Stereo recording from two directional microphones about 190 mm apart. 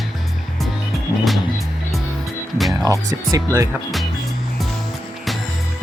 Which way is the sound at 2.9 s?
15° right (ahead or behind).